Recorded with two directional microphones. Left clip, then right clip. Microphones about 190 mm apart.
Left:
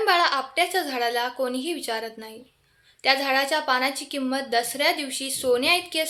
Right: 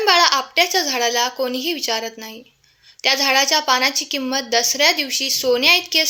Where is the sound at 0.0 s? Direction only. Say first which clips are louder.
Right 6 dB; 25° right (ahead or behind).